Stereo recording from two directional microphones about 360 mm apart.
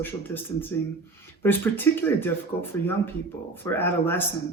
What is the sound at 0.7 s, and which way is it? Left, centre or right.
Speech, centre.